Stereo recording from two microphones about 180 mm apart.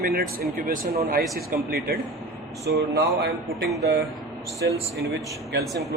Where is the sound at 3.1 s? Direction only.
60° right (ahead or behind).